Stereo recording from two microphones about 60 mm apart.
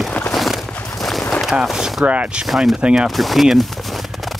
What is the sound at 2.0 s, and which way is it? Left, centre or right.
Speech, right.